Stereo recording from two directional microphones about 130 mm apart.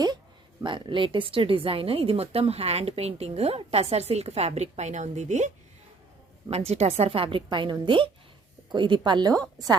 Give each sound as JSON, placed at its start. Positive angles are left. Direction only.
{"t": 0.6, "sound": "a woman's voice", "side_deg": -40}
{"t": 6.7, "sound": "a woman's voice", "side_deg": -55}